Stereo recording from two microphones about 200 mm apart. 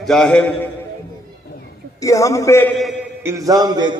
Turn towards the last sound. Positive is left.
turn(degrees=-20)  # may be behind; listen again after turning